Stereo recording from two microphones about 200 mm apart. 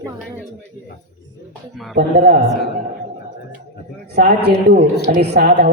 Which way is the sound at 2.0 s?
50° right (ahead or behind).